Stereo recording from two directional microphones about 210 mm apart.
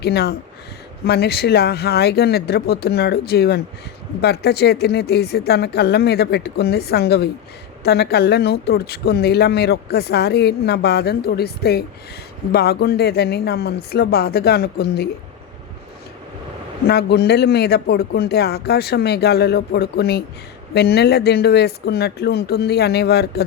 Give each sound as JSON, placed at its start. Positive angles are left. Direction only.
{"t": 0.0, "sound": "speech", "side_deg": 50}
{"t": 16.8, "sound": "speech", "side_deg": 50}